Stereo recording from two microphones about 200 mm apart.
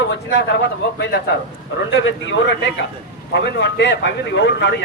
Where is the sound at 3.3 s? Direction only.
60° left (ahead or behind).